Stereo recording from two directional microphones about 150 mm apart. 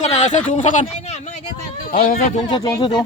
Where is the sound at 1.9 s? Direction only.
80° left.